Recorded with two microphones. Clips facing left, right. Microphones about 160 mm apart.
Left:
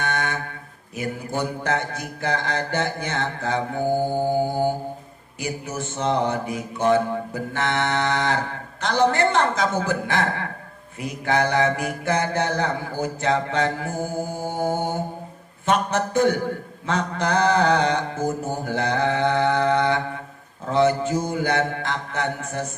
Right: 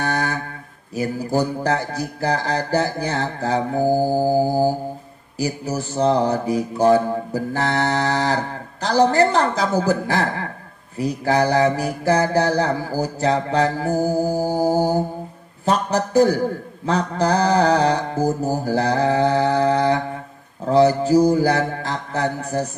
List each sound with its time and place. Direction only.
0.0 s mantra: 35° right (ahead or behind)
0.9 s music: 35° right (ahead or behind)
15.6 s speech: 35° right (ahead or behind)
16.8 s music: 35° right (ahead or behind)